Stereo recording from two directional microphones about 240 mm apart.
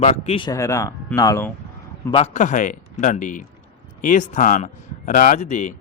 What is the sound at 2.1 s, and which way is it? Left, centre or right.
Speech, left.